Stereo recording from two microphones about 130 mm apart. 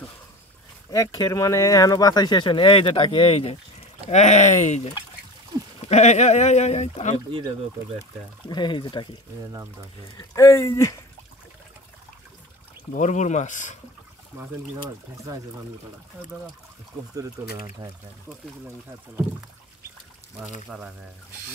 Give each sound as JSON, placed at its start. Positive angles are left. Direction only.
{"t": 0.8, "sound": "speech", "side_deg": 30}
{"t": 4.1, "sound": "speech", "side_deg": 60}
{"t": 5.9, "sound": "speech", "side_deg": 60}
{"t": 8.5, "sound": "speech", "side_deg": 35}
{"t": 10.1, "sound": "speech", "side_deg": 25}
{"t": 12.9, "sound": "speech", "side_deg": 70}
{"t": 17.2, "sound": "speech", "side_deg": -25}
{"t": 20.7, "sound": "speech", "side_deg": -10}